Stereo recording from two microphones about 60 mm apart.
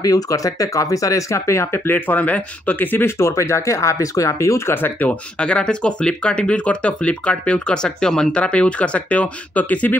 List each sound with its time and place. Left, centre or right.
0.0 s speech: left
3.2 s speech: left
4.7 s speech: left
5.4 s speech: centre